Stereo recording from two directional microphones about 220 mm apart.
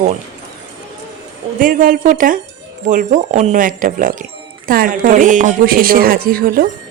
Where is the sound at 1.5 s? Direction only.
40° right (ahead or behind).